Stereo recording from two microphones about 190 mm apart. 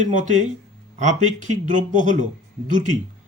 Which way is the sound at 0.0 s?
40° right (ahead or behind).